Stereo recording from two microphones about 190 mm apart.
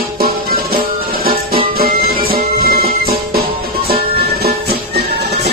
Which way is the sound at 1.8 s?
50° right (ahead or behind).